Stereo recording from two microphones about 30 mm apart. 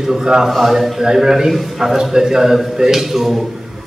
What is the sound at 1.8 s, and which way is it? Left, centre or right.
A man's voice, centre.